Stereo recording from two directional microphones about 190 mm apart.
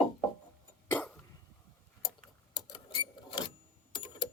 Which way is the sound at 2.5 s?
25° left (ahead or behind).